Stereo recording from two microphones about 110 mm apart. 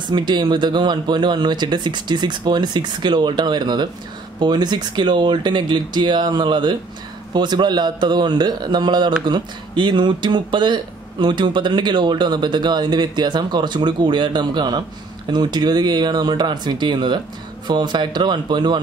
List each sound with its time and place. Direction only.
0.1 s speech: 45° right (ahead or behind)